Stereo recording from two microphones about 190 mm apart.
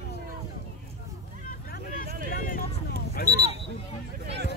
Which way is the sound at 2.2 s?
45° left (ahead or behind).